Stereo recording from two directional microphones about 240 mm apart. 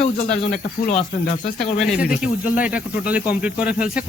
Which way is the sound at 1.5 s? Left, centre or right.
Centre.